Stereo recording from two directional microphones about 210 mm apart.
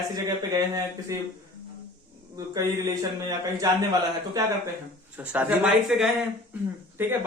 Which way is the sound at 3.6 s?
15° right (ahead or behind).